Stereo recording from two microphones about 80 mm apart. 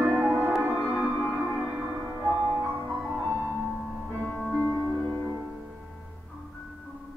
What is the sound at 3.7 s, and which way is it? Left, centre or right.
Music, centre.